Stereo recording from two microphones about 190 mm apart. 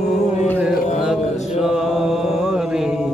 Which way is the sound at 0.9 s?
Centre (ahead or behind).